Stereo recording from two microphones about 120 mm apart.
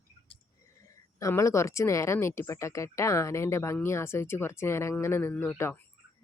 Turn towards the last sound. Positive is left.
turn(degrees=20)  # may be behind; listen again after turning